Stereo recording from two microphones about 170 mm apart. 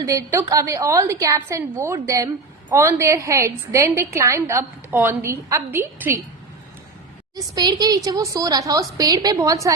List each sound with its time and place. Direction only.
0.0 s a woman's voice: 20° right (ahead or behind)
7.3 s a woman's voice: 25° right (ahead or behind)